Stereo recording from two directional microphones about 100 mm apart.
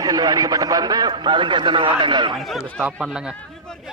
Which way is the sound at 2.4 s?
Centre (ahead or behind).